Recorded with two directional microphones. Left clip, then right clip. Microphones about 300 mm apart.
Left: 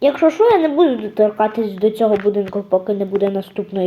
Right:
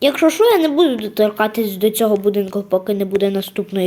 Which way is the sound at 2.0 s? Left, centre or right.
Right.